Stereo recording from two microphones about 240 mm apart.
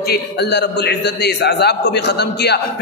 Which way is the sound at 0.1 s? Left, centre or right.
Left.